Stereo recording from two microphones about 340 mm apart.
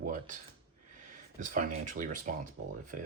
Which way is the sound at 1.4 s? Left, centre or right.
Right.